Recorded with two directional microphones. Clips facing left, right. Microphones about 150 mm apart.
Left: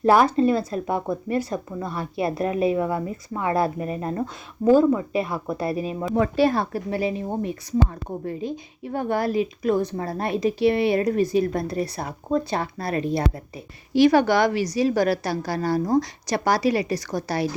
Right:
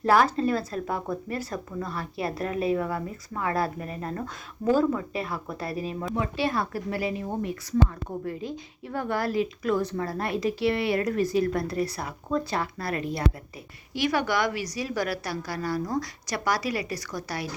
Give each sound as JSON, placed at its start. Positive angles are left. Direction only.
{"t": 0.0, "sound": "a woman's voice", "side_deg": 20}
{"t": 6.1, "sound": "speech", "side_deg": 40}
{"t": 6.6, "sound": "a woman's voice", "side_deg": 25}